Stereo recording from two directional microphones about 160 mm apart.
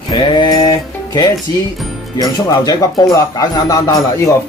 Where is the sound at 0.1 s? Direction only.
25° left (ahead or behind).